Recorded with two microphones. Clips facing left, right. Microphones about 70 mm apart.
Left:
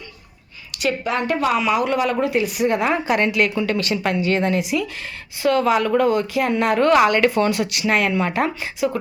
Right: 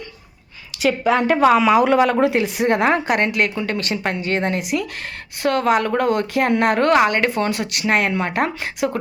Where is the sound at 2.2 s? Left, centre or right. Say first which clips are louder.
Right 2 dB; right.